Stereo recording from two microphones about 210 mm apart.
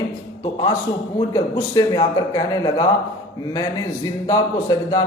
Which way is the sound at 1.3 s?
20° left (ahead or behind).